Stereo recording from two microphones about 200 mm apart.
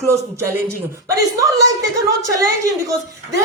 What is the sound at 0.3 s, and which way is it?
A woman's voice, 10° right (ahead or behind).